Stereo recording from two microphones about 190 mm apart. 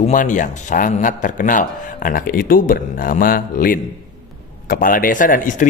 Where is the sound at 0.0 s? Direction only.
40° left (ahead or behind).